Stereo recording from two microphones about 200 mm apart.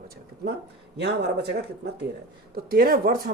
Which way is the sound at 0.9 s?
55° right (ahead or behind).